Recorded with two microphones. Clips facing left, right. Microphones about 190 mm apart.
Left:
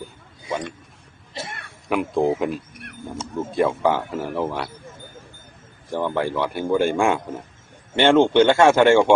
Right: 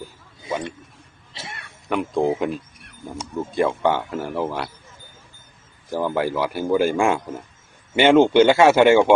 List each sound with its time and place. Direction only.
1.3 s cough: 50° left (ahead or behind)
1.9 s a man's voice: 5° left (ahead or behind)
5.9 s a man's voice: 5° right (ahead or behind)